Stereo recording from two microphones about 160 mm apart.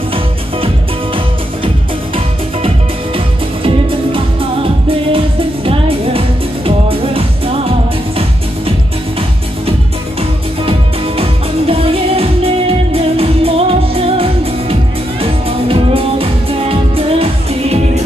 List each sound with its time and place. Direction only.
3.6 s music: 35° right (ahead or behind)
10.6 s music: 35° right (ahead or behind)